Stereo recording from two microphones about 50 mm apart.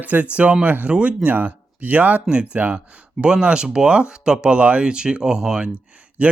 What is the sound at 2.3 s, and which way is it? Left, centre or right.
Speech, right.